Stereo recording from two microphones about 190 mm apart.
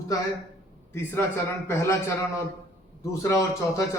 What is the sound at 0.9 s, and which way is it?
Speech, 10° left (ahead or behind).